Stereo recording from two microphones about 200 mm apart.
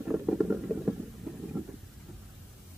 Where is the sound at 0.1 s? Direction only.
5° right (ahead or behind).